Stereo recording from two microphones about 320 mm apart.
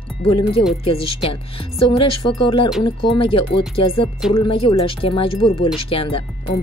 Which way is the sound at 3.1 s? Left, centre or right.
Centre.